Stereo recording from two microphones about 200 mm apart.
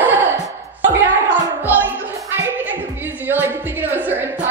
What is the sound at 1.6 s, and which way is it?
Music, 10° right (ahead or behind).